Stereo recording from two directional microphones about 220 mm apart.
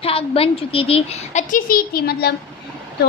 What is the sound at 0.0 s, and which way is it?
A woman's voice, 25° left (ahead or behind).